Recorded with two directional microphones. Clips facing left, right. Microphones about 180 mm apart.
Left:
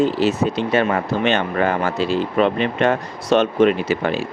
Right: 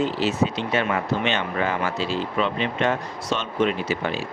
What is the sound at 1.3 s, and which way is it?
Speech, 55° left (ahead or behind).